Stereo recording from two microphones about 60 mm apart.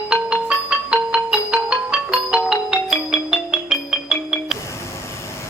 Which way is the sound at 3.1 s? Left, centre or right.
Centre.